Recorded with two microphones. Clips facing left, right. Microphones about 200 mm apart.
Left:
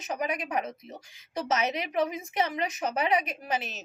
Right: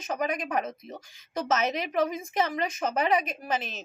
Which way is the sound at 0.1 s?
15° left (ahead or behind).